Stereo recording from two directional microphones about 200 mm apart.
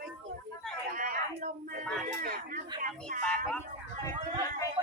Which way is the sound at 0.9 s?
40° right (ahead or behind).